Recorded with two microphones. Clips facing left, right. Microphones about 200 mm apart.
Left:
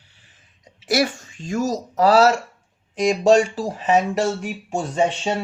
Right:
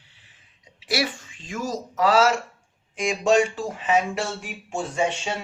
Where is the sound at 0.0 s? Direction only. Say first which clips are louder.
Left 2 dB; 45° left (ahead or behind).